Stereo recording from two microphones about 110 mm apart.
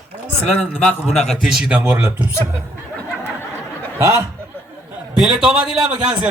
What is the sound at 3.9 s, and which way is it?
Speech, 30° right (ahead or behind).